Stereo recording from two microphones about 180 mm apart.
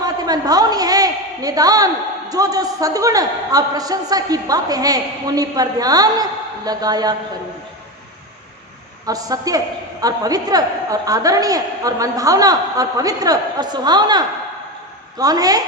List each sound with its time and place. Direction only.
0.0 s a sound: 20° right (ahead or behind)
2.3 s a woman's voice: 20° right (ahead or behind)
9.0 s a woman's voice: 20° right (ahead or behind)